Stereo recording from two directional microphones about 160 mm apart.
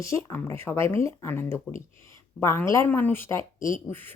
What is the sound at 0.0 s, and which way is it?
Speech, 15° left (ahead or behind).